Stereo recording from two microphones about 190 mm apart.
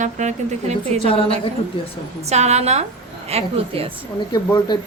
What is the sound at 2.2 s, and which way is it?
A woman's voice, 35° right (ahead or behind).